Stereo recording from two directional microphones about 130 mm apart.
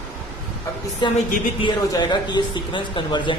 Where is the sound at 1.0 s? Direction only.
35° left (ahead or behind).